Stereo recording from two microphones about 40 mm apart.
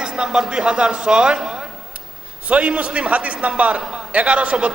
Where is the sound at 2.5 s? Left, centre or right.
Right.